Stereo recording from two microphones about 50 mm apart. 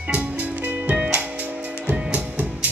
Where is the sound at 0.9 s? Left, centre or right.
Right.